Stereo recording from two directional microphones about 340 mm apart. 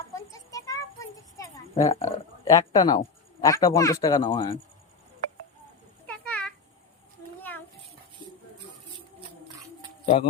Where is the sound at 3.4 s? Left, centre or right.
Centre.